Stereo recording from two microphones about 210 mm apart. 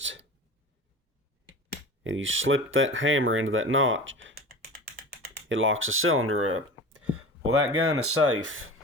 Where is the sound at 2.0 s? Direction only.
65° right (ahead or behind).